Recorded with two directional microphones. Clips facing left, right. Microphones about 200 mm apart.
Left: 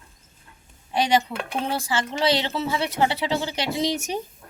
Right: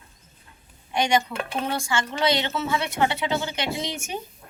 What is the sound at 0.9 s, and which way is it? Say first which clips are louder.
Speech: left 1 dB; 35° left (ahead or behind).